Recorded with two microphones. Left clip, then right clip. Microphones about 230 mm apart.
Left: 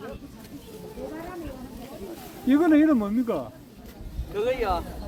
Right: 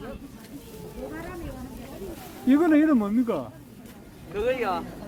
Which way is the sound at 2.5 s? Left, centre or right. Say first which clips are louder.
Even; centre.